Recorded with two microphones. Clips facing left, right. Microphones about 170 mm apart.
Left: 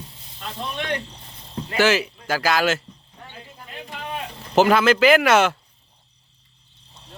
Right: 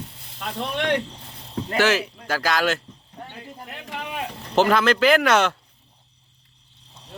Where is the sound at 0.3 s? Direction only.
65° right (ahead or behind).